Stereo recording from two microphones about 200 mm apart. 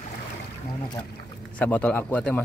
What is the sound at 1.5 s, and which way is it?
Speech, 5° left (ahead or behind).